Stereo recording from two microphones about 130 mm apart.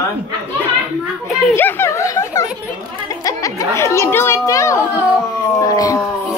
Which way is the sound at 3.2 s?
25° left (ahead or behind).